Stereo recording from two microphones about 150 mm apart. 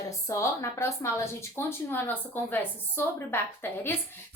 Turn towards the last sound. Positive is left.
turn(degrees=15)  # may be behind; listen again after turning